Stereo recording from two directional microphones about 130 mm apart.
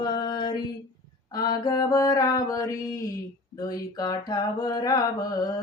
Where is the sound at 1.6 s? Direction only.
30° left (ahead or behind).